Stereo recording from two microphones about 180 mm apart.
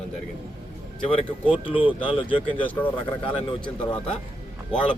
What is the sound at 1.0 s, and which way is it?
A man's voice, 35° left (ahead or behind).